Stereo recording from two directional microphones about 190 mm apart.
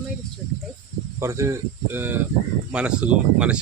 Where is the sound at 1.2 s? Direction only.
15° right (ahead or behind).